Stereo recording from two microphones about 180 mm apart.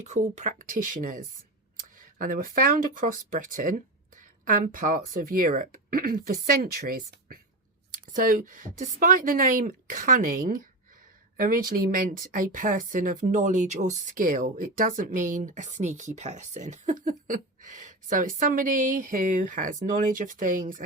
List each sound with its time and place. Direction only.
0.0 s speech: 40° right (ahead or behind)